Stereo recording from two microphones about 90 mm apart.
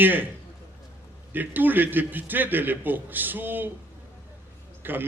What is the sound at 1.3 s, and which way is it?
A man's voice, 20° right (ahead or behind).